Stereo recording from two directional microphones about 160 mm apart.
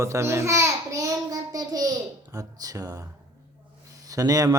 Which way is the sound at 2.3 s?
20° right (ahead or behind).